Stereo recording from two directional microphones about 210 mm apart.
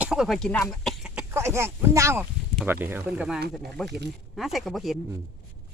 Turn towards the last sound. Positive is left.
turn(degrees=0)  # may be behind; listen again after turning